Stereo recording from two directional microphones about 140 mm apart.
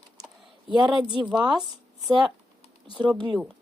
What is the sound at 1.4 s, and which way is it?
Speech, 35° right (ahead or behind).